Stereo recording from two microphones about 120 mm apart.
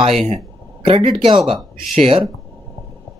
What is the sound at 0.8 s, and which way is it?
Speech, 45° right (ahead or behind).